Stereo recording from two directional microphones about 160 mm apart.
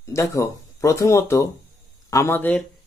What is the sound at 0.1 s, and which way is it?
Speech, 20° left (ahead or behind).